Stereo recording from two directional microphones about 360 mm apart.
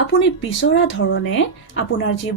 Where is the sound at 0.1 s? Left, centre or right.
Left.